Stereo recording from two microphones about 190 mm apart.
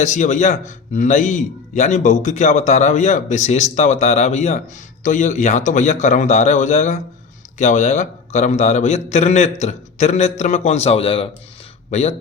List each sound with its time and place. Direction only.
0.0 s a man's voice: 40° left (ahead or behind)